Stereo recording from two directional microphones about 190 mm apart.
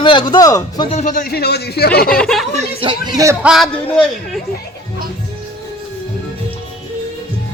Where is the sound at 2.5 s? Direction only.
25° right (ahead or behind).